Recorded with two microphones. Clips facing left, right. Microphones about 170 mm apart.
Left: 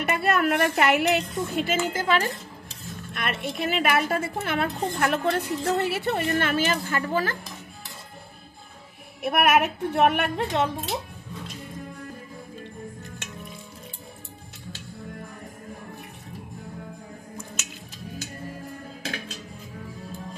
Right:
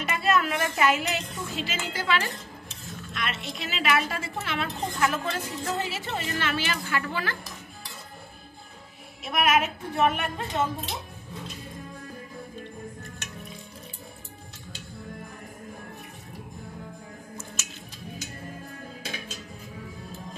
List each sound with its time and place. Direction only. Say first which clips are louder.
0.0 s a woman's voice: left 2 dB; 60° left (ahead or behind); by 7.3 s 45° left (ahead or behind)
9.2 s a woman's voice: left 3 dB; 60° left (ahead or behind)